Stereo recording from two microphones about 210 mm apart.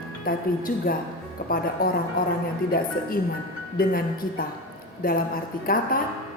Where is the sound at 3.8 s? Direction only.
45° left (ahead or behind).